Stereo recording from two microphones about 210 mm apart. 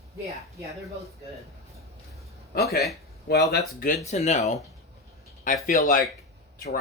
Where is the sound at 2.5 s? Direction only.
45° left (ahead or behind).